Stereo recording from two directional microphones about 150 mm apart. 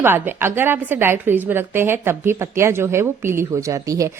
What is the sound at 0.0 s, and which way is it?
A woman's voice, 15° right (ahead or behind).